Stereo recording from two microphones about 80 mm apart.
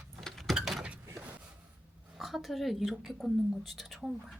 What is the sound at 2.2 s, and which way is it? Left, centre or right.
A woman's voice, centre.